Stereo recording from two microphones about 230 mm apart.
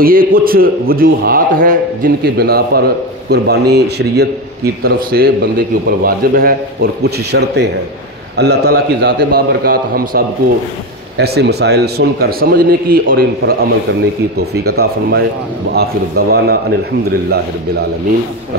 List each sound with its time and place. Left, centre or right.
0.0 s a man's voice: right